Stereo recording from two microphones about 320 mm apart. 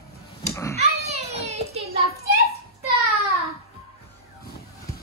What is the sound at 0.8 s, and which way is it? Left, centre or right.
Children playing, centre.